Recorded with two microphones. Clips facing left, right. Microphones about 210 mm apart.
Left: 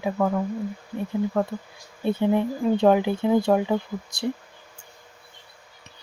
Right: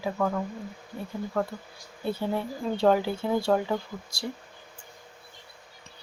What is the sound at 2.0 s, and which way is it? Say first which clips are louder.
Speech: left 7 dB; 20° left (ahead or behind).